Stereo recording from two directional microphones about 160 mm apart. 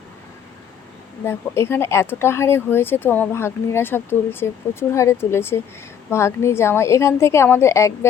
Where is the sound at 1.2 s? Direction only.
15° left (ahead or behind).